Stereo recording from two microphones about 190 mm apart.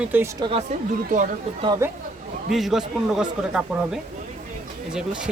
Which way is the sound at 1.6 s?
20° right (ahead or behind).